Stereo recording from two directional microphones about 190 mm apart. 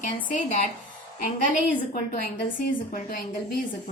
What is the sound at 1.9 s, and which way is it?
A woman's voice, 45° left (ahead or behind).